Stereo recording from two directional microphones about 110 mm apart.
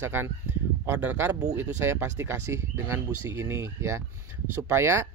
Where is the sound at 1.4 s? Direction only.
25° right (ahead or behind).